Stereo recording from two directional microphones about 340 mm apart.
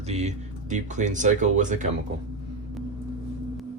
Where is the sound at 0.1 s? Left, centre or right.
Centre.